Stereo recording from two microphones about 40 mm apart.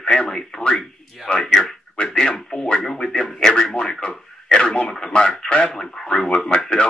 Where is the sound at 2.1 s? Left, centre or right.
Centre.